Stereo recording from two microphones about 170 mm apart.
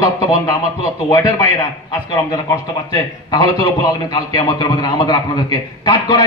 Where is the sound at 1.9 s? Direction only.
20° left (ahead or behind).